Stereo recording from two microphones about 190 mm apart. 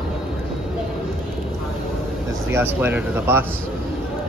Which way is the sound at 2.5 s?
10° right (ahead or behind).